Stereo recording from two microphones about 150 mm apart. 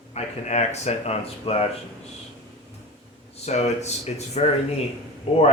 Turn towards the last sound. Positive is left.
turn(degrees=40)  # may be behind; listen again after turning